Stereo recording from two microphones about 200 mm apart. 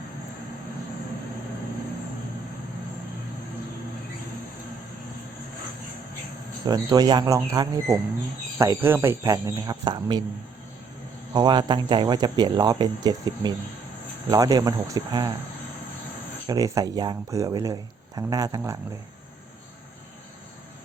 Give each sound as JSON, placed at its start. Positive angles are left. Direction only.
{"t": 6.7, "sound": "speech", "side_deg": -20}
{"t": 11.3, "sound": "speech", "side_deg": -20}
{"t": 16.5, "sound": "speech", "side_deg": -20}